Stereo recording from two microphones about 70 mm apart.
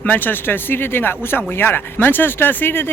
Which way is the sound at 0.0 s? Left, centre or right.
Left.